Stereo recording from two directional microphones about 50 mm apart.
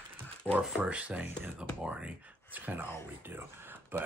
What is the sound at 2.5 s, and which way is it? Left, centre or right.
Speech, right.